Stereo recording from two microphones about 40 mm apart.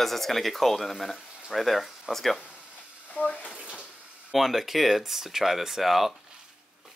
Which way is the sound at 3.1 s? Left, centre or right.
Left.